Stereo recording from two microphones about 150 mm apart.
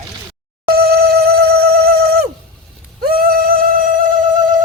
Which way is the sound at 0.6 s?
90° right.